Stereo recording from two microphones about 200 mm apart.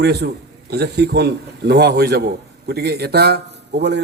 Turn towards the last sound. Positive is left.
turn(degrees=-55)  # may be behind; listen again after turning